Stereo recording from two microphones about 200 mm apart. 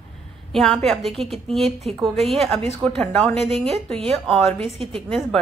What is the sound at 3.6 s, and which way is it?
A woman's voice, 30° right (ahead or behind).